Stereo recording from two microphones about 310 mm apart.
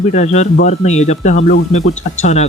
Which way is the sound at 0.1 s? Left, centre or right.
Left.